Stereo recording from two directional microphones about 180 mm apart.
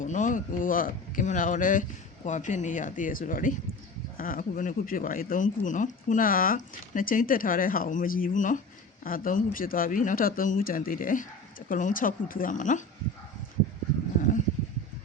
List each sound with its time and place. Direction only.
0.0 s speech: 45° left (ahead or behind)